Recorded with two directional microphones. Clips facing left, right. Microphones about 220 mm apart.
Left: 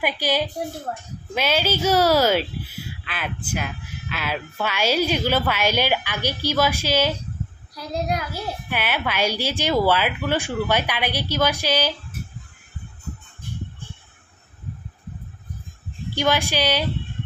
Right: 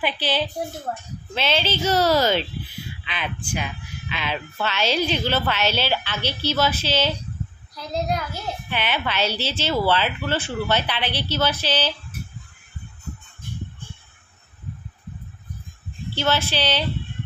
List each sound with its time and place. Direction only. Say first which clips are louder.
0.0 s speech: left 1 dB; 10° left (ahead or behind)
16.2 s speech: left 2 dB; 15° left (ahead or behind)